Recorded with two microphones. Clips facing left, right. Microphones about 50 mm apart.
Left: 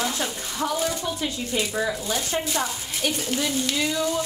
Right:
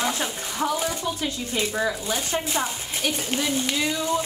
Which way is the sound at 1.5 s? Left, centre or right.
Right.